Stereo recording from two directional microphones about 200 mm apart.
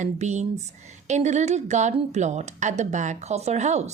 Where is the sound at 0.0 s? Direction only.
35° right (ahead or behind).